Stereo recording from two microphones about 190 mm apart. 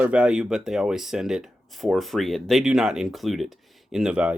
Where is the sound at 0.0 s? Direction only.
5° right (ahead or behind).